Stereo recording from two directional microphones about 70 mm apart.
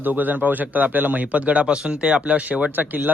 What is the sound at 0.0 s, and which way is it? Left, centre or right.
A man's voice, right.